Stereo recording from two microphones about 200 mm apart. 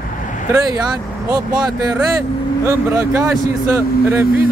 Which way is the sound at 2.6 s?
15° right (ahead or behind).